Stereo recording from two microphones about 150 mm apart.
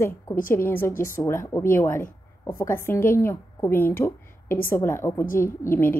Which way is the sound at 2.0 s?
65° left (ahead or behind).